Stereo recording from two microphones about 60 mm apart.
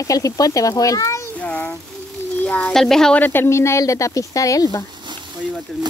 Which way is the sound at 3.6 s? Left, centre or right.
Left.